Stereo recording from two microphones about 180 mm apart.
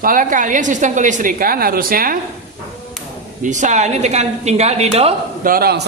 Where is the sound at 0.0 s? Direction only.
50° right (ahead or behind).